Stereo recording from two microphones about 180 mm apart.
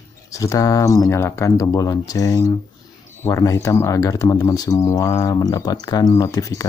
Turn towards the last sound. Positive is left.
turn(degrees=20)  # may be behind; listen again after turning